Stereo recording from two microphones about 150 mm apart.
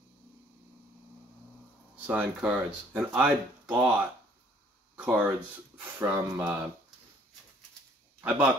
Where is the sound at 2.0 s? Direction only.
10° right (ahead or behind).